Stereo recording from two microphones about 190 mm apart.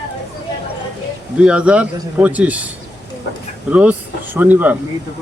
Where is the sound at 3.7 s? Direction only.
10° right (ahead or behind).